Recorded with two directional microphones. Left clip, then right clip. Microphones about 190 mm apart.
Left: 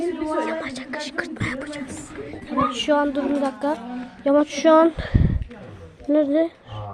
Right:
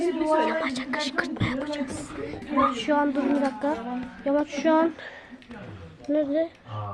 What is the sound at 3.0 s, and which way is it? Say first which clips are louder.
Speech: left 2 dB; 10° left (ahead or behind).